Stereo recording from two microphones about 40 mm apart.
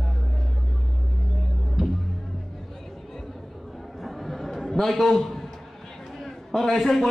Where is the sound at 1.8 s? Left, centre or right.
Centre.